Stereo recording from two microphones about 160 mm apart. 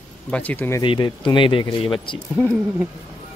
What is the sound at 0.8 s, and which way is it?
Speech, 30° left (ahead or behind).